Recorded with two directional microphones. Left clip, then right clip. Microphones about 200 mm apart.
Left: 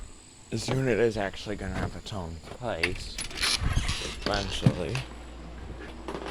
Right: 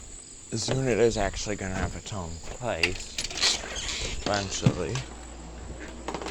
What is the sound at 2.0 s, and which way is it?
Speech, 5° left (ahead or behind).